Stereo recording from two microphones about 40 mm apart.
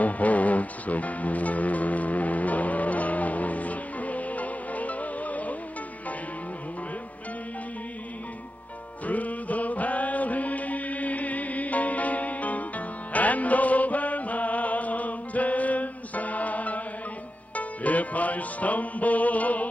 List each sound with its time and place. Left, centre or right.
0.0 s music: left
9.0 s mantra: left
17.6 s music: left